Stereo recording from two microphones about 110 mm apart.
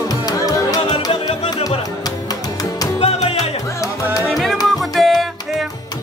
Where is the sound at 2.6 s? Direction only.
35° left (ahead or behind).